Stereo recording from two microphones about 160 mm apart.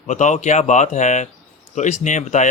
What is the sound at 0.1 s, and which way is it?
Speech, 50° left (ahead or behind).